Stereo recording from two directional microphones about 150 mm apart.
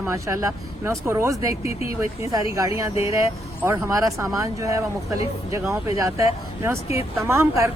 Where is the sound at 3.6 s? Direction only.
20° right (ahead or behind).